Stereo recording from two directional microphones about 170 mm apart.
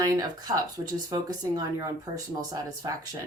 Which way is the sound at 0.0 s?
20° right (ahead or behind).